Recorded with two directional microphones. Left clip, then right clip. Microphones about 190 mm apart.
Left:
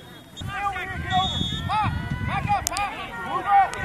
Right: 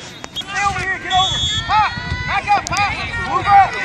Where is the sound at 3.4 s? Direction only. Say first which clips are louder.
Right 8 dB; 45° left (ahead or behind).